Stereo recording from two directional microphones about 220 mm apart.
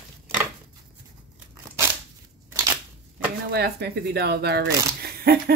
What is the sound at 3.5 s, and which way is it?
Speech, 50° right (ahead or behind).